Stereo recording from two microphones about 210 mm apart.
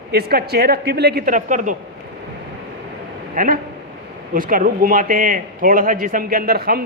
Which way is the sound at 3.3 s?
40° right (ahead or behind).